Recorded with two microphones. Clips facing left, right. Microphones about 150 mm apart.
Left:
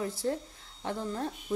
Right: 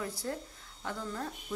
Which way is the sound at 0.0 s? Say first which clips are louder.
Left 5 dB; 25° left (ahead or behind).